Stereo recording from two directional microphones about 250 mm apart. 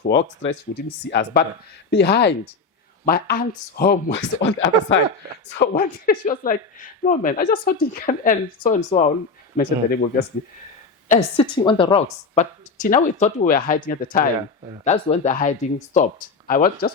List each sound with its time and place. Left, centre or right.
0.1 s speech: left
5.5 s speech: left
11.1 s a woman's voice: centre